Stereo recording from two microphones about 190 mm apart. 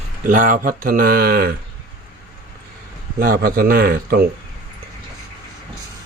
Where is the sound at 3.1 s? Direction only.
50° right (ahead or behind).